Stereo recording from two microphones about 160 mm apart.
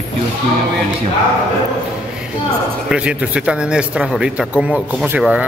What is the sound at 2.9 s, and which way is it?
Speech, 5° right (ahead or behind).